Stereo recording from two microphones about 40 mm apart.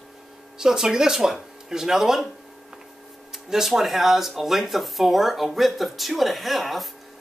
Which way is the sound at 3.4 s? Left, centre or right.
Centre.